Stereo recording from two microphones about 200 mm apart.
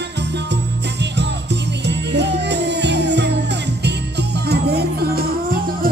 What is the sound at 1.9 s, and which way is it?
Music, 60° right (ahead or behind).